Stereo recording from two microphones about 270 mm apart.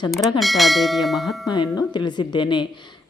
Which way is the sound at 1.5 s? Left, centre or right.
Centre.